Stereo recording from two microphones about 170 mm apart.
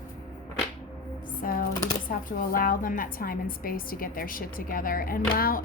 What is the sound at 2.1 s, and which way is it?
A woman's voice, 55° left (ahead or behind).